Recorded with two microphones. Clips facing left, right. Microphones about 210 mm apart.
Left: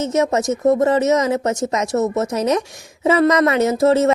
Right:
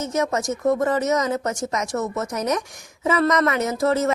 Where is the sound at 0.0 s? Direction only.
25° left (ahead or behind).